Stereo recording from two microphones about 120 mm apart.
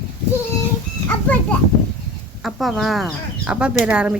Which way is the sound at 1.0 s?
15° left (ahead or behind).